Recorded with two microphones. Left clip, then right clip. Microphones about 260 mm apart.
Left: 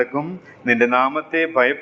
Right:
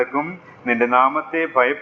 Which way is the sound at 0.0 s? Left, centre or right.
Left.